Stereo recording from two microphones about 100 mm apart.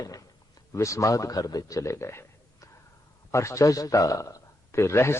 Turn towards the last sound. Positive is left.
turn(degrees=30)  # may be behind; listen again after turning